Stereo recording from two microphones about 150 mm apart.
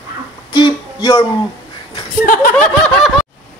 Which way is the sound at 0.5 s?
30° left (ahead or behind).